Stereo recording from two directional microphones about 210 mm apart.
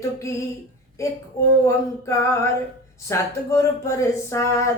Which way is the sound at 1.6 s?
15° left (ahead or behind).